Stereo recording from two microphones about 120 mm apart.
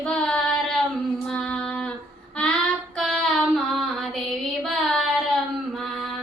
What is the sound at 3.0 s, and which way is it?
Child singing, centre (ahead or behind).